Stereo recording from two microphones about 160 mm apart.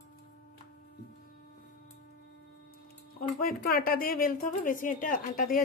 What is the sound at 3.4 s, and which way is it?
Speech, 65° left (ahead or behind).